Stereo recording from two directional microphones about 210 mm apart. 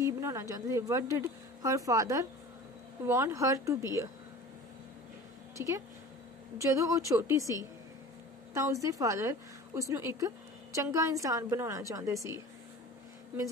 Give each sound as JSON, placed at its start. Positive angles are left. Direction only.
{"t": 0.0, "sound": "a woman's voice", "side_deg": -15}
{"t": 5.6, "sound": "a woman's voice", "side_deg": -10}
{"t": 8.5, "sound": "a woman's voice", "side_deg": -15}